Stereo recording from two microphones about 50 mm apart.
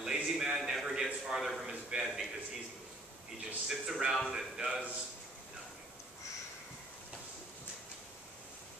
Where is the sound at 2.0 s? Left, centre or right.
Centre.